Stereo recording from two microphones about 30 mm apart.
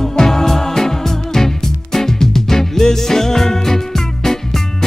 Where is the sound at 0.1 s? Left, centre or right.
Centre.